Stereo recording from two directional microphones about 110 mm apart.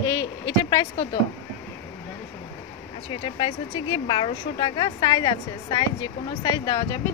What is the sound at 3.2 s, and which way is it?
A woman's voice, 50° left (ahead or behind).